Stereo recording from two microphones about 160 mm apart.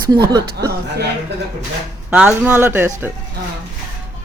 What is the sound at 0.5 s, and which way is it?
Speech, 90° right.